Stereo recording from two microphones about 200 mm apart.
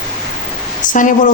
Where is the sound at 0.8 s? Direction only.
40° left (ahead or behind).